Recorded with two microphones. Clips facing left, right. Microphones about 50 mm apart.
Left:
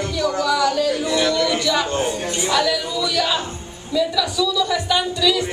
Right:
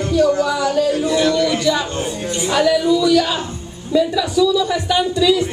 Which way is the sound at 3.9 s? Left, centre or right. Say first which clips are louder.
Right 4 dB; right.